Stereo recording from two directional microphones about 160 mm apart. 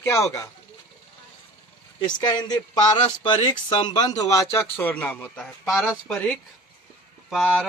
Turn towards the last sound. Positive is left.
turn(degrees=0)  # may be behind; listen again after turning